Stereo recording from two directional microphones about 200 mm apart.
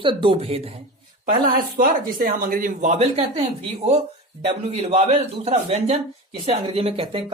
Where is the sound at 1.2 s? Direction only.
45° right (ahead or behind).